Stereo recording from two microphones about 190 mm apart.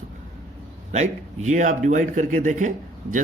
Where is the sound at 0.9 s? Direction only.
40° right (ahead or behind).